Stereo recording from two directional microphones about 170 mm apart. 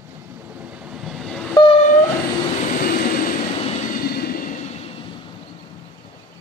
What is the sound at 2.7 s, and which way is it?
Vehicle, 55° left (ahead or behind).